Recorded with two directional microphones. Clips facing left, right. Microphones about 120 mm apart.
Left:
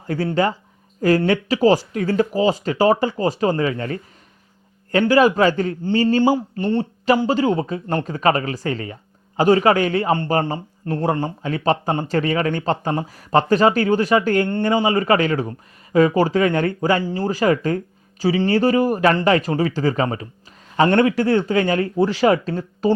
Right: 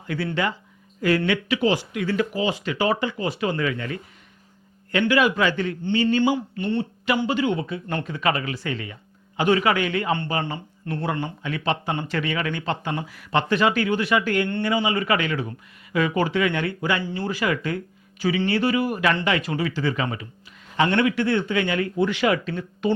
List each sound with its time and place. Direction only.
0.1 s a man's voice: 40° left (ahead or behind)